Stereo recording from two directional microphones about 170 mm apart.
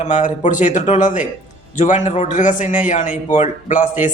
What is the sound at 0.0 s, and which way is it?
A man's voice, 45° left (ahead or behind).